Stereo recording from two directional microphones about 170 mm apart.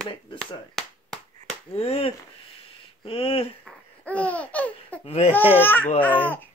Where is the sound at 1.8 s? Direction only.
35° left (ahead or behind).